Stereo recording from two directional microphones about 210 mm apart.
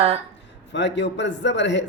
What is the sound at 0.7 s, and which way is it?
A man's voice, 55° left (ahead or behind).